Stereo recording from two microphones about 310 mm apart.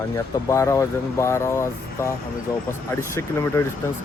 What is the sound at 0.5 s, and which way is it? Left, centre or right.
Speech, centre.